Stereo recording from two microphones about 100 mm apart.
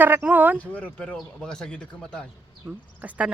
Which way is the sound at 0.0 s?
15° right (ahead or behind).